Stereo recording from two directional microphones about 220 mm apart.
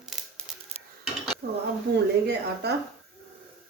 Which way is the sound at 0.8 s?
30° right (ahead or behind).